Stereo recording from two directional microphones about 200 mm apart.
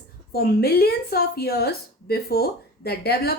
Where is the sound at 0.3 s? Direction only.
50° left (ahead or behind).